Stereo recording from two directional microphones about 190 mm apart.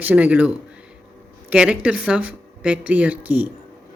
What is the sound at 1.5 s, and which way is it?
Speech, 5° right (ahead or behind).